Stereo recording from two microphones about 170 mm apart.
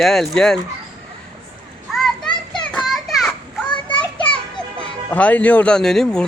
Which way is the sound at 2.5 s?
Centre (ahead or behind).